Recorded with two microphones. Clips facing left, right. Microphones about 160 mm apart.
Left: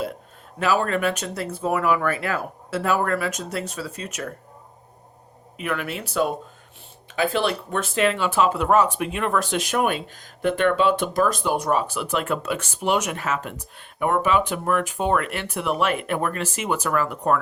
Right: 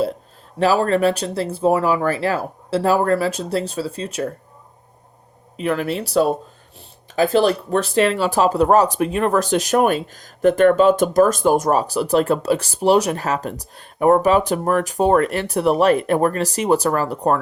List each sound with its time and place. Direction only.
0.6 s speech: 35° right (ahead or behind)
5.5 s speech: 35° right (ahead or behind)